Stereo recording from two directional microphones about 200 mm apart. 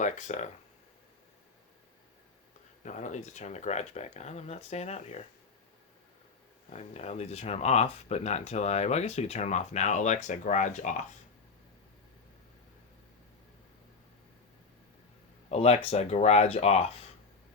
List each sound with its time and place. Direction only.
0.0 s speech: 35° left (ahead or behind)
2.8 s speech: 35° left (ahead or behind)
6.7 s speech: 35° left (ahead or behind)
15.4 s speech: 30° left (ahead or behind)